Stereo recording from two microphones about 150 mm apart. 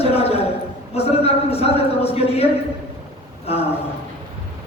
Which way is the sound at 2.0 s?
40° left (ahead or behind).